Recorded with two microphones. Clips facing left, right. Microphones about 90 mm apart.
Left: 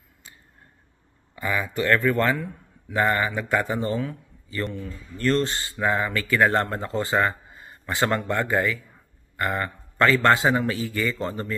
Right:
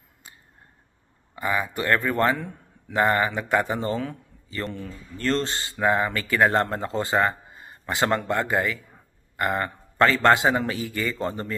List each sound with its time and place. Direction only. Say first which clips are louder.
1.3 s speech: right 1 dB; 25° right (ahead or behind)
3.9 s a man's voice: left 1 dB; 35° right (ahead or behind)